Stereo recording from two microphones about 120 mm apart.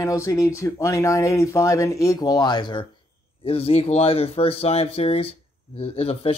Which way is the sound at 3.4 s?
55° left (ahead or behind).